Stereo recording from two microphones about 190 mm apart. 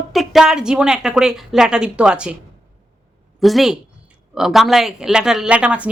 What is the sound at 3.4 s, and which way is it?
Speech, centre (ahead or behind).